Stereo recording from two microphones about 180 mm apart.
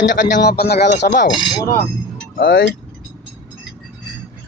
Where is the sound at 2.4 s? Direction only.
55° left (ahead or behind).